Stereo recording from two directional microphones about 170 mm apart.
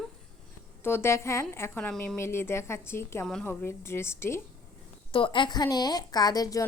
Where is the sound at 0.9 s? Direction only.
15° left (ahead or behind).